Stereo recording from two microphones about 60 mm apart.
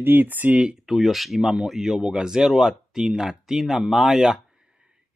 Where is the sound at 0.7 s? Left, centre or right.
Centre.